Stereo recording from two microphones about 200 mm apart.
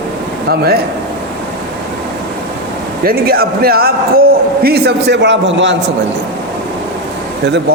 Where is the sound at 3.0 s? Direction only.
50° right (ahead or behind).